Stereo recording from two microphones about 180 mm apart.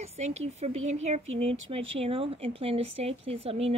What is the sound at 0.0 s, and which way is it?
Speech, 35° right (ahead or behind).